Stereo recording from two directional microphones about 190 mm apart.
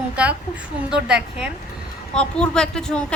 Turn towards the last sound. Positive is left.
turn(degrees=5)  # may be behind; listen again after turning